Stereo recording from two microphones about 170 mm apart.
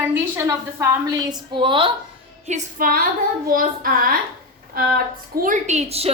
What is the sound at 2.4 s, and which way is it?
Child singing, 50° right (ahead or behind).